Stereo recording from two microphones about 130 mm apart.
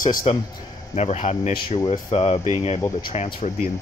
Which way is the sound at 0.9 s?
55° left (ahead or behind).